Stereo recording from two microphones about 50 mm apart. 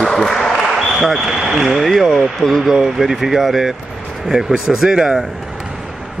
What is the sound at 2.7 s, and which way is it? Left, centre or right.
Speech, centre.